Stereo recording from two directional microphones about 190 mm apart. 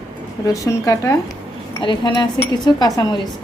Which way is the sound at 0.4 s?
15° left (ahead or behind).